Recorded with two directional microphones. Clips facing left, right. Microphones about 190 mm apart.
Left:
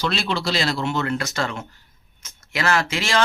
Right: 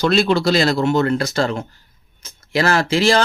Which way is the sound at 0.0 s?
45° right (ahead or behind).